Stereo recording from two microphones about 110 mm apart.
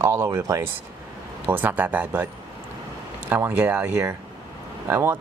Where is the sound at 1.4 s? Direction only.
15° right (ahead or behind).